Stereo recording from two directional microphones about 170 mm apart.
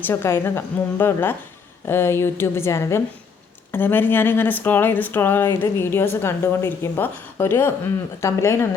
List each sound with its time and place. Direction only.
0.0 s speech: 15° left (ahead or behind)